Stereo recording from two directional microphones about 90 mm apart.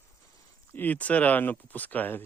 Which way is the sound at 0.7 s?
20° left (ahead or behind).